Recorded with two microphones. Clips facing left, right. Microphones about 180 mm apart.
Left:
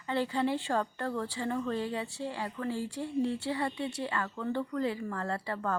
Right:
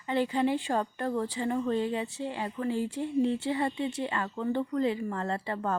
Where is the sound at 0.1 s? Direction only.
15° right (ahead or behind).